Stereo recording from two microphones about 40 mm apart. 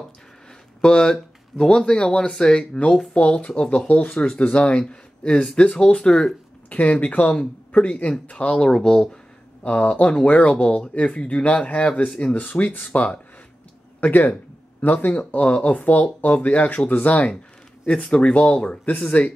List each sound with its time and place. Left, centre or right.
0.7 s speech: centre
6.7 s speech: left
8.6 s speech: centre
9.6 s speech: left
14.0 s speech: left
15.1 s speech: left
18.1 s speech: left
18.9 s speech: left